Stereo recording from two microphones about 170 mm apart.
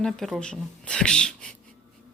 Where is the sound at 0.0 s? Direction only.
5° left (ahead or behind).